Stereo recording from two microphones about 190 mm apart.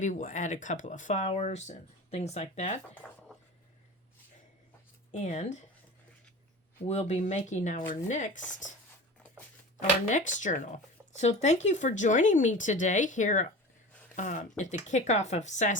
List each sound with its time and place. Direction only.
0.0 s speech: 40° left (ahead or behind)
3.0 s a sound: centre (ahead or behind)
5.1 s speech: 40° left (ahead or behind)
6.8 s speech: 35° left (ahead or behind)
10.1 s speech: 40° left (ahead or behind)